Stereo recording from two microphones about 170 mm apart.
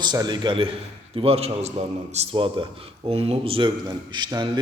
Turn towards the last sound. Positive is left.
turn(degrees=-25)  # may be behind; listen again after turning